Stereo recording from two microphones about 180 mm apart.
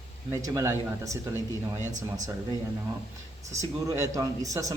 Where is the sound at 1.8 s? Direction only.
45° right (ahead or behind).